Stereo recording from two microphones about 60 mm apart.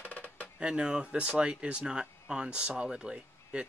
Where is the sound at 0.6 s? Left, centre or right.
Centre.